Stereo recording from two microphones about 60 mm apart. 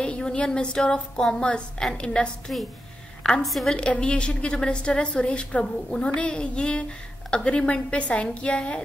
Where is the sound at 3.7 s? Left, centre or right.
Centre.